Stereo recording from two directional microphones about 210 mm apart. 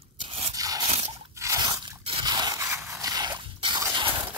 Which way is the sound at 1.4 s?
15° right (ahead or behind).